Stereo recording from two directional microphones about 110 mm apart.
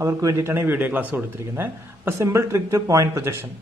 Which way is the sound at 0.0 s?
30° right (ahead or behind).